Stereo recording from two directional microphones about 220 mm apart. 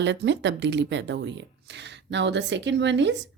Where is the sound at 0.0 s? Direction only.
55° right (ahead or behind).